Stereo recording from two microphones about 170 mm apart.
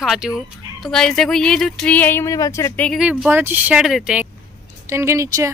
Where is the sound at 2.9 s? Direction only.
5° right (ahead or behind).